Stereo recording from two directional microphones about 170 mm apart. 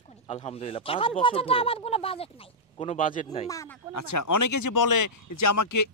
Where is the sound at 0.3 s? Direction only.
35° left (ahead or behind).